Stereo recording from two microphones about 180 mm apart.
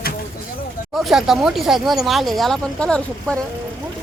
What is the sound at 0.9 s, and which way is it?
Speech, centre (ahead or behind).